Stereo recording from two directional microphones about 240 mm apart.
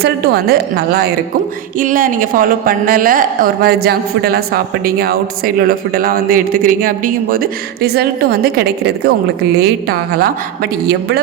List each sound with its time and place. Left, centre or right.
0.0 s speech: right